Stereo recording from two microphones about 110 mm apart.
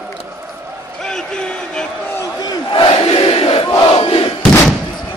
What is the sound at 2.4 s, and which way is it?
Crowd, 50° left (ahead or behind).